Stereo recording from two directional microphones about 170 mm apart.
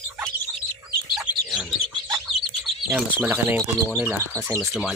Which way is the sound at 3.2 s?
10° right (ahead or behind).